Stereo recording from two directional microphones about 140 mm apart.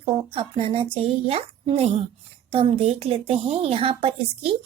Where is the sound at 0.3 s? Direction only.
45° right (ahead or behind).